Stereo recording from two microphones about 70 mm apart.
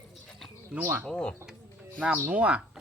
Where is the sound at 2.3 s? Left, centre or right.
Centre.